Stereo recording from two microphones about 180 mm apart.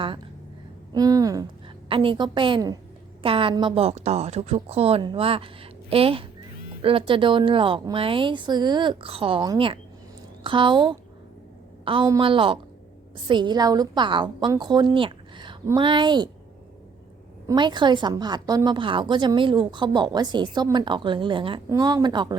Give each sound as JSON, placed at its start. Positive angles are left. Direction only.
{"t": 0.9, "sound": "a woman's voice", "side_deg": -20}
{"t": 1.9, "sound": "a woman's voice", "side_deg": -30}
{"t": 17.4, "sound": "a woman's voice", "side_deg": -25}